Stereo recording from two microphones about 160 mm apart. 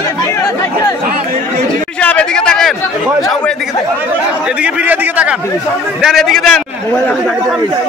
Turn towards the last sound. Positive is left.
turn(degrees=0)  # may be behind; listen again after turning